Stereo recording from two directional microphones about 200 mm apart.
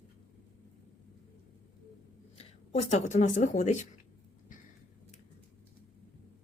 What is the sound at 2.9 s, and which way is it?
Speech, 35° left (ahead or behind).